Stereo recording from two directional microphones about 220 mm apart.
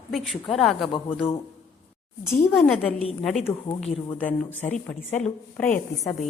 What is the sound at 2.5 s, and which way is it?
A woman's voice, centre (ahead or behind).